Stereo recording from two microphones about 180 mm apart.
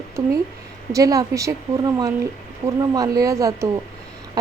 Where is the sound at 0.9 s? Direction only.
20° right (ahead or behind).